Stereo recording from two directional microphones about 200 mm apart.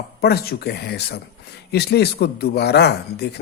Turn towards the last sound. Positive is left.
turn(degrees=55)  # may be behind; listen again after turning